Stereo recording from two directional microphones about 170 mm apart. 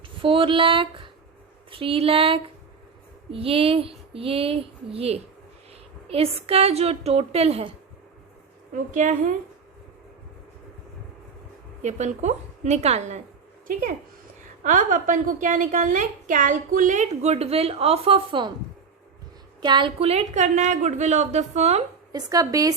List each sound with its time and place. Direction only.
0.2 s a woman's voice: 30° right (ahead or behind)
8.7 s a woman's voice: 50° right (ahead or behind)
11.8 s a woman's voice: 40° right (ahead or behind)
14.6 s a woman's voice: 50° right (ahead or behind); by 18.5 s 30° right (ahead or behind)
19.6 s a woman's voice: 30° right (ahead or behind)
22.1 s speech: 20° right (ahead or behind)